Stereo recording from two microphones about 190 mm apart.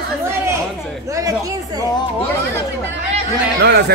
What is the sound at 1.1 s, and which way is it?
Speech, 15° right (ahead or behind).